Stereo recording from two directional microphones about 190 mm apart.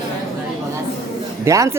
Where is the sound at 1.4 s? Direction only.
15° right (ahead or behind).